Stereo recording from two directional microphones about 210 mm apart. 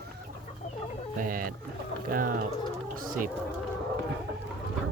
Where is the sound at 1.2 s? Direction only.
40° right (ahead or behind).